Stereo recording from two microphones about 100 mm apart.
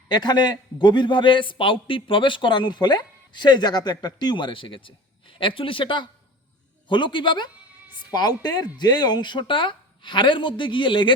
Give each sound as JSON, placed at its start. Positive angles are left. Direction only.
{"t": 0.1, "sound": "a man's voice", "side_deg": 45}